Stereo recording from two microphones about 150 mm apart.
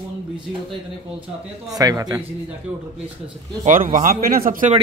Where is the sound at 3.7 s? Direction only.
60° right (ahead or behind).